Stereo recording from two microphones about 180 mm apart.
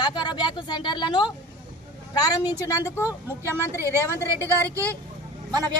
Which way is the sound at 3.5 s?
15° right (ahead or behind).